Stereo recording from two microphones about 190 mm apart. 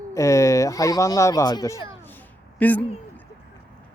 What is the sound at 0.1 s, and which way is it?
Speech, 15° left (ahead or behind).